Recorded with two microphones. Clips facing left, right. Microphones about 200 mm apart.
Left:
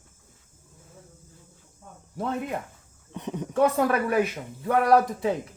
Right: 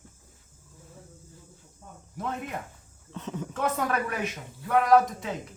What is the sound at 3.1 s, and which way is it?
Speech, 20° left (ahead or behind).